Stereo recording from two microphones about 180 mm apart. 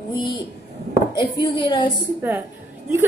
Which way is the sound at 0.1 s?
25° left (ahead or behind).